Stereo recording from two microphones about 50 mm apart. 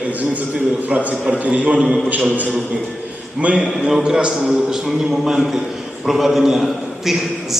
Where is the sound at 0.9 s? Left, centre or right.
Right.